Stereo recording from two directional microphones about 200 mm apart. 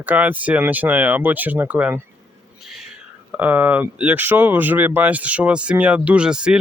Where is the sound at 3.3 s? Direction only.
10° right (ahead or behind).